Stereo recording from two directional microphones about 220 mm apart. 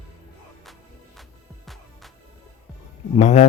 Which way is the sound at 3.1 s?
30° left (ahead or behind).